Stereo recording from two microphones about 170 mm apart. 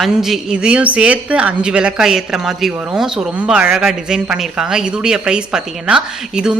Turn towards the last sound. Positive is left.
turn(degrees=-5)  # may be behind; listen again after turning